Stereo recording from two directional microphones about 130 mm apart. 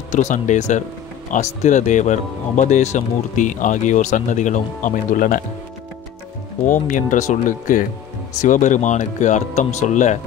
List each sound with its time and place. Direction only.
0.1 s speech: 70° left (ahead or behind); by 5.4 s 90° left
6.7 s speech: 80° left
8.4 s speech: 75° left (ahead or behind)